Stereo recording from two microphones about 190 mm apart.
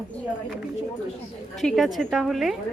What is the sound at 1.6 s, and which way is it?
A woman's voice, centre (ahead or behind).